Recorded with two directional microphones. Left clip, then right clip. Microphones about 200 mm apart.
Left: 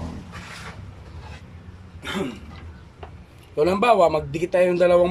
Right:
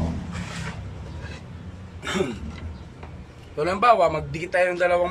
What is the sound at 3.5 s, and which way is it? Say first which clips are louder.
Speech: left 1 dB; 20° left (ahead or behind).